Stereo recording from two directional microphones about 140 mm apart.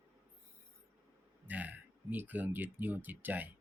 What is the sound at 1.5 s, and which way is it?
Speech, 10° right (ahead or behind).